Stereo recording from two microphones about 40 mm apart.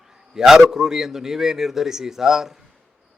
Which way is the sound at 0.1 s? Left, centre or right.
Centre.